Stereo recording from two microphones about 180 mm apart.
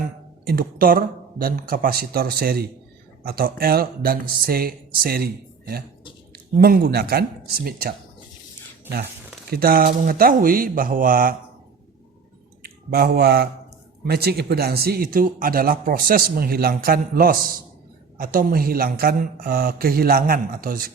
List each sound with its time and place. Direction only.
0.4 s speech: 55° right (ahead or behind)
9.5 s speech: 55° right (ahead or behind)
12.6 s speech: 55° right (ahead or behind)